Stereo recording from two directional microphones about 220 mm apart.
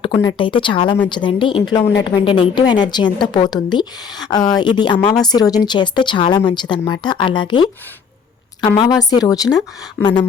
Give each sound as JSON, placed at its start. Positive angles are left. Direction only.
{"t": 0.0, "sound": "a woman's voice", "side_deg": 20}